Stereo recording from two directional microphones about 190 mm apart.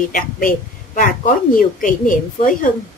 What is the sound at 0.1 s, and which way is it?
A woman's voice, 45° left (ahead or behind).